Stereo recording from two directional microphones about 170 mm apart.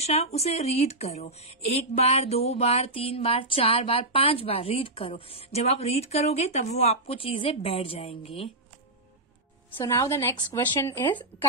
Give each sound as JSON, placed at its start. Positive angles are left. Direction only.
{"t": 0.0, "sound": "speech", "side_deg": 40}
{"t": 9.8, "sound": "a woman's voice", "side_deg": 15}